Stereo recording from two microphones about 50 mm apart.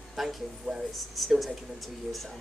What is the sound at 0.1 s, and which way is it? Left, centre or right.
A man's voice, centre.